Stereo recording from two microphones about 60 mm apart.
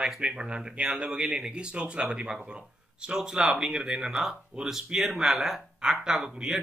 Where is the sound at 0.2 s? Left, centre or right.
Centre.